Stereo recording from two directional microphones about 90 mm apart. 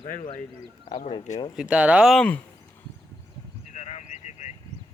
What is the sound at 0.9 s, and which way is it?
Speech, 60° left (ahead or behind).